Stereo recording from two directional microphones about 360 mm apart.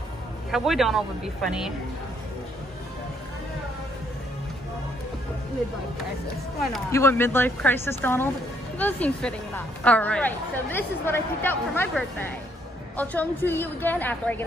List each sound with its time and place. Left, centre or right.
0.5 s a woman's voice: centre
6.7 s a woman's voice: centre